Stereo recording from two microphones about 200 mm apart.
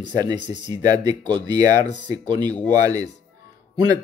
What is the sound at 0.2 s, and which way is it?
A man's voice, 20° right (ahead or behind).